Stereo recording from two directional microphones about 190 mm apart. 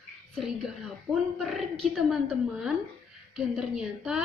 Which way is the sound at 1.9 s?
Centre (ahead or behind).